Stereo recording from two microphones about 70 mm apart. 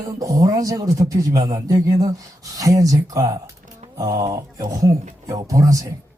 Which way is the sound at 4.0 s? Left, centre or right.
Right.